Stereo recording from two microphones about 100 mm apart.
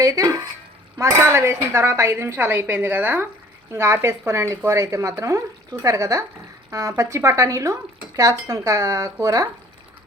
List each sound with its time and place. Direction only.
0.0 s speech: 35° right (ahead or behind)